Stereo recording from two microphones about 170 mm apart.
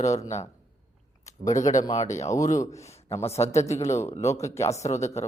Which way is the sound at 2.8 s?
40° left (ahead or behind).